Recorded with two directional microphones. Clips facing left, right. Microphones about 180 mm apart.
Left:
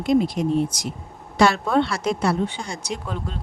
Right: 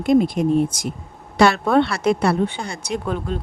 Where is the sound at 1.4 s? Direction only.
65° right (ahead or behind).